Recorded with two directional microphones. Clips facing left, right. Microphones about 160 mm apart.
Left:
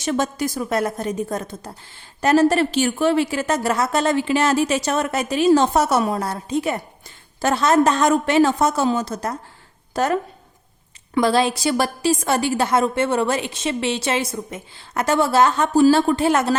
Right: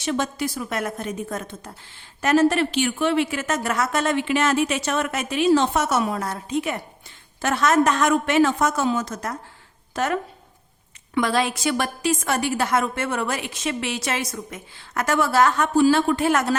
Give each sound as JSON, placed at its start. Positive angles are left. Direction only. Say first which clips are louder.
{"t": 0.0, "sound": "a woman's voice", "louder": "left 3 dB", "side_deg": 45}